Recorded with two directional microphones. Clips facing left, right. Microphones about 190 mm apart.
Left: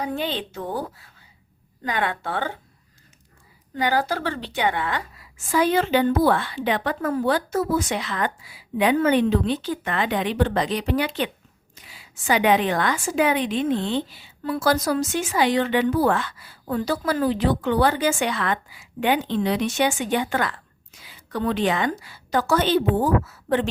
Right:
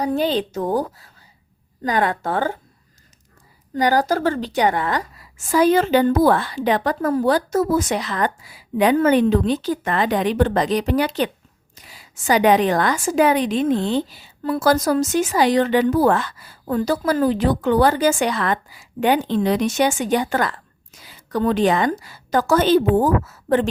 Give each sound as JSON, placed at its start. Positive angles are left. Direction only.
{"t": 0.0, "sound": "a woman's voice", "side_deg": -40}
{"t": 3.8, "sound": "a woman's voice", "side_deg": -40}